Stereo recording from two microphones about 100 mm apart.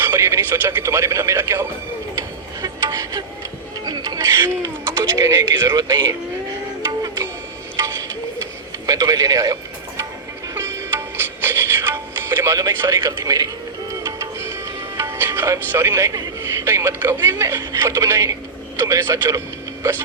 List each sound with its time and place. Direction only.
0.0 s speech: 25° right (ahead or behind)
2.6 s music: 40° right (ahead or behind)
3.8 s a sound: 45° right (ahead or behind)
4.2 s speech: 30° right (ahead or behind)
6.8 s music: 40° right (ahead or behind)
8.9 s speech: 40° right (ahead or behind)
10.5 s music: 30° right (ahead or behind)
12.8 s speech: 30° right (ahead or behind)
14.2 s music: 30° right (ahead or behind)
17.3 s speech: 30° right (ahead or behind)